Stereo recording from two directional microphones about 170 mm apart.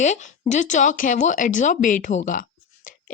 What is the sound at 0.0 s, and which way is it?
Speech, 45° left (ahead or behind).